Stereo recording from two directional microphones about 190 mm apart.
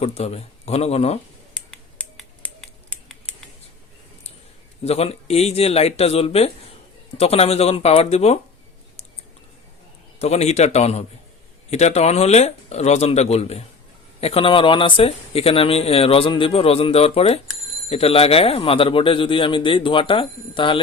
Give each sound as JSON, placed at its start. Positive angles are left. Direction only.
{"t": 0.0, "sound": "speech", "side_deg": 35}
{"t": 1.5, "sound": "finger snapping", "side_deg": 0}
{"t": 4.8, "sound": "speech", "side_deg": 35}
{"t": 10.2, "sound": "speech", "side_deg": 35}